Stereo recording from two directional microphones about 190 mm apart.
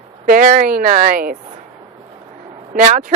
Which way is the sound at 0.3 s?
45° right (ahead or behind).